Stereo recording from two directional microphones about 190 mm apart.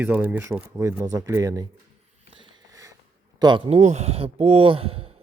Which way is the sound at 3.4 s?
25° right (ahead or behind).